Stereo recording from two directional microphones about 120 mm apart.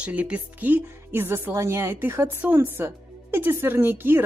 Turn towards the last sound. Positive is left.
turn(degrees=-15)  # may be behind; listen again after turning